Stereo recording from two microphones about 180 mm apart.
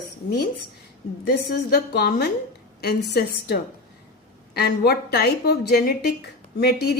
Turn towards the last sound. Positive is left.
turn(degrees=60)  # may be behind; listen again after turning